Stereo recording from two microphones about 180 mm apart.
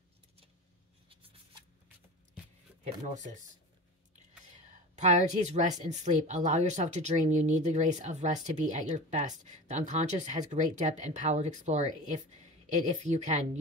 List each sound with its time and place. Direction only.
1.0 s a sound: 30° right (ahead or behind)
2.8 s speech: 40° right (ahead or behind)
4.5 s a woman's voice: 40° right (ahead or behind)